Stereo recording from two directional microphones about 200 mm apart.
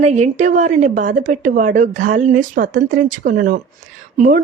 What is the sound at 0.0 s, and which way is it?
A woman's voice, 35° right (ahead or behind).